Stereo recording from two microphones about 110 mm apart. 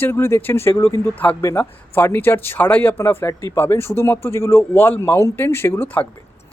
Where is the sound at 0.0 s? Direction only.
20° left (ahead or behind).